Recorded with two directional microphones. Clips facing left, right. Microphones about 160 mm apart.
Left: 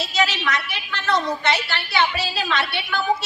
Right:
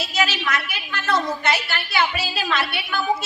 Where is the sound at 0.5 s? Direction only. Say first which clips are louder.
Even; centre (ahead or behind).